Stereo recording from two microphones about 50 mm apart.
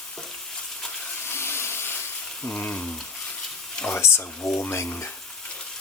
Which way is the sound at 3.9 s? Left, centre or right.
Left.